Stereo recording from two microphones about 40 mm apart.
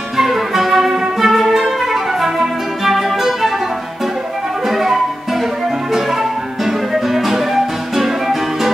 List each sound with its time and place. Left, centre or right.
0.2 s music: centre
4.6 s music: centre